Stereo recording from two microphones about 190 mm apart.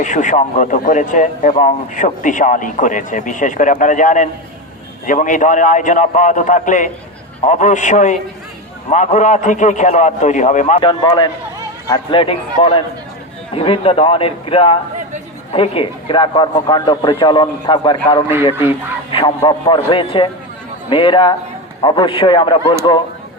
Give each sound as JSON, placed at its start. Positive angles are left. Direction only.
{"t": 0.0, "sound": "a man's voice", "side_deg": 40}
{"t": 10.8, "sound": "speech", "side_deg": 25}
{"t": 19.4, "sound": "speech", "side_deg": 25}